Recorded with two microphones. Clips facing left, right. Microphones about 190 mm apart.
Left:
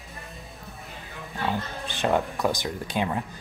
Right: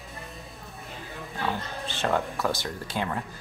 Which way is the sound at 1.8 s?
15° left (ahead or behind).